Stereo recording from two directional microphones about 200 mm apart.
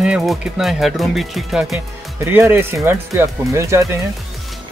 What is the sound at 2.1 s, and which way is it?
Speech, 10° right (ahead or behind).